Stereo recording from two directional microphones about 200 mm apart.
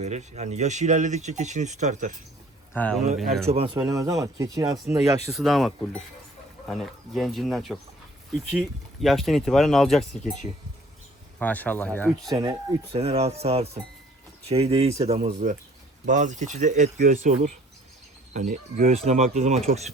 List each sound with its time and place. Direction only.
0.0 s speech: 35° right (ahead or behind)
2.7 s speech: 5° left (ahead or behind)
3.4 s speech: 30° right (ahead or behind)
3.8 s speech: 20° right (ahead or behind)
5.3 s speech: centre (ahead or behind)
12.3 s speech: 20° right (ahead or behind)
13.0 s speech: 30° right (ahead or behind)